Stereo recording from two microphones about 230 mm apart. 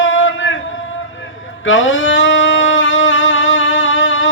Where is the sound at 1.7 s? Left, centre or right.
Left.